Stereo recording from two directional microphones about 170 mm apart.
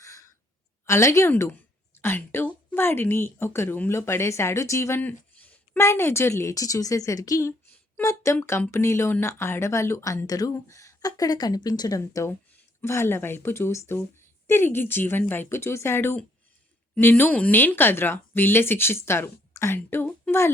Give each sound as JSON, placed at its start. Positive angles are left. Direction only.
{"t": 0.0, "sound": "sigh", "side_deg": 20}
{"t": 0.9, "sound": "a woman's voice", "side_deg": 15}